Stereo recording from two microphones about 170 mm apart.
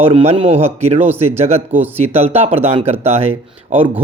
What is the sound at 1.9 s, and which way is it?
Speech, 35° right (ahead or behind).